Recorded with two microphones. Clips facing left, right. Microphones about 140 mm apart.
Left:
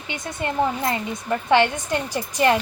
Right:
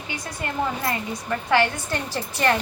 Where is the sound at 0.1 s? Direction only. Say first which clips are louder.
Left 4 dB; 20° left (ahead or behind).